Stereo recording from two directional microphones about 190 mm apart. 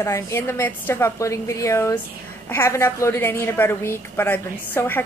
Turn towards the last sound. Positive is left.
turn(degrees=10)  # may be behind; listen again after turning